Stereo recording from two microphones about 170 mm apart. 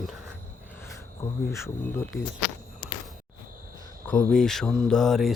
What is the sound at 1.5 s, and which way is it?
Speech, 15° left (ahead or behind).